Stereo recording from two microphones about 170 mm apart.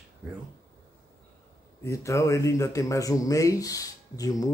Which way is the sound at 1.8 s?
20° left (ahead or behind).